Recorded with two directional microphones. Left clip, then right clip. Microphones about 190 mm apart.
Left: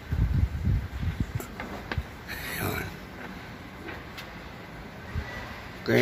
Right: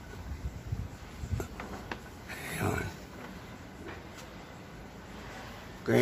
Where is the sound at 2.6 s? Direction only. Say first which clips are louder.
Even; 20° right (ahead or behind).